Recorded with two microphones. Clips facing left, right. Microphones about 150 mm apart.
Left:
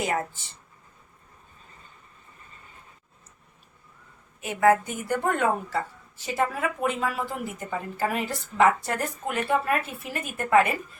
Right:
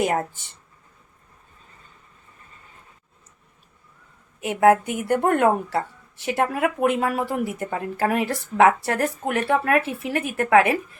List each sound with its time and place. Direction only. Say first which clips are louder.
4.4 s a woman's voice: right 4 dB; 70° right (ahead or behind)